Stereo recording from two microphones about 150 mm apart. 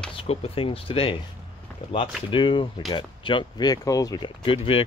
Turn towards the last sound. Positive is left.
turn(degrees=35)  # may be behind; listen again after turning